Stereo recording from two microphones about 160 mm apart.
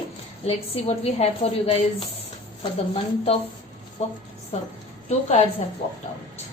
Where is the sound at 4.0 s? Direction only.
45° left (ahead or behind).